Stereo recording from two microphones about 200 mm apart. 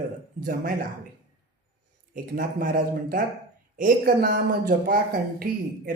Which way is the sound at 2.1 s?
45° right (ahead or behind).